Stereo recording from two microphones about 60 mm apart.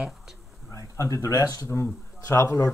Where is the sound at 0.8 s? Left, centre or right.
Left.